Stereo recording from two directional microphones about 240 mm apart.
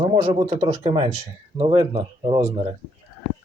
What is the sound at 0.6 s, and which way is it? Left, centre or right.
Speech, right.